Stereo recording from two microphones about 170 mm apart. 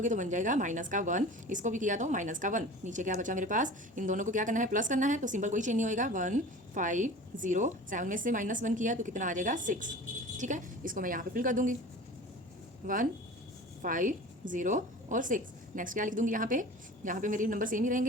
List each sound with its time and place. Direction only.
0.0 s a woman's voice: 45° right (ahead or behind)
12.8 s a woman's voice: 50° right (ahead or behind)